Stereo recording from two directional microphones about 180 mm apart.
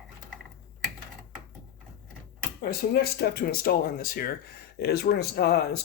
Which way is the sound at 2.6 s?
55° left (ahead or behind).